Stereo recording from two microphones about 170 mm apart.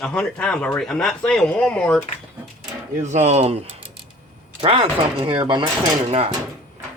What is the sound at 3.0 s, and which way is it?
Speech, 45° right (ahead or behind).